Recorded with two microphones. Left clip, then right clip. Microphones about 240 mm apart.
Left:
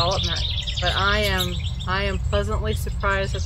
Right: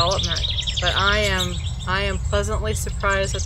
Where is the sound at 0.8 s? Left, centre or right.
Centre.